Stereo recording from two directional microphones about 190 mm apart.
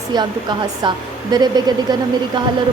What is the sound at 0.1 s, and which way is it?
A woman's voice, 20° right (ahead or behind).